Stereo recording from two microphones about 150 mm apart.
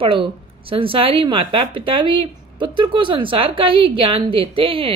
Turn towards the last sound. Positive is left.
turn(degrees=-35)  # may be behind; listen again after turning